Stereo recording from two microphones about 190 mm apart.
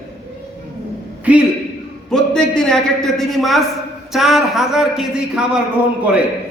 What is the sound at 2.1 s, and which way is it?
A man's voice, 5° left (ahead or behind).